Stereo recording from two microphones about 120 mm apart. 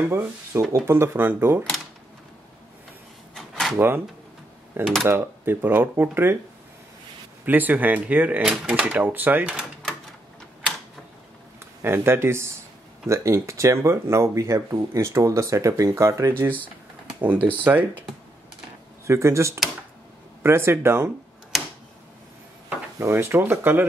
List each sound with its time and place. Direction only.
0.1 s speech: 20° right (ahead or behind)
3.3 s a sound: centre (ahead or behind)
3.7 s speech: 20° right (ahead or behind)
5.0 s speech: 20° right (ahead or behind)
7.4 s speech: 15° right (ahead or behind)
11.6 s speech: 20° right (ahead or behind)
19.0 s speech: 25° right (ahead or behind)
22.9 s speech: 20° right (ahead or behind)